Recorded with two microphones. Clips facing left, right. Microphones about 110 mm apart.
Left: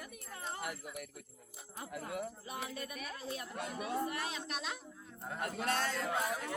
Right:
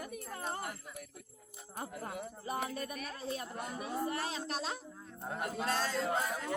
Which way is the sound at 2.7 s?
40° right (ahead or behind).